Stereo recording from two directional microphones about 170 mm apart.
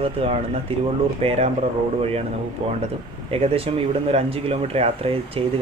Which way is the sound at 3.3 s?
35° right (ahead or behind).